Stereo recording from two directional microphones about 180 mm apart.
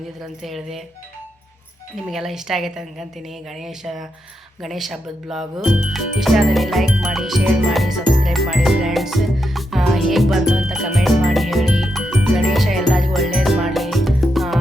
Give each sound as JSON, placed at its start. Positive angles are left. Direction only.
{"t": 0.2, "sound": "a woman's voice", "side_deg": 0}
{"t": 2.0, "sound": "a woman's voice", "side_deg": 0}
{"t": 5.6, "sound": "music", "side_deg": 0}